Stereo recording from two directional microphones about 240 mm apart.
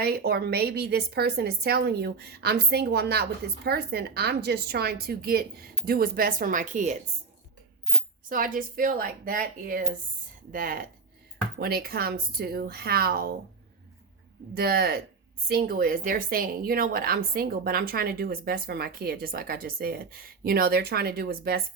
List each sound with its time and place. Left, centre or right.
0.0 s a woman's voice: right
8.3 s a woman's voice: right
14.5 s a woman's voice: right